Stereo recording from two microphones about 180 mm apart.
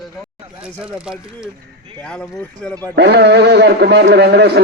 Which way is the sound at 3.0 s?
65° right (ahead or behind).